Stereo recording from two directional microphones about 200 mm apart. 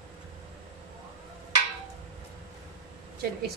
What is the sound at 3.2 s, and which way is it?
Speech, 50° right (ahead or behind).